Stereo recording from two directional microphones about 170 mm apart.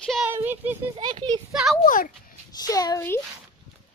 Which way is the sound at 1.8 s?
50° left (ahead or behind).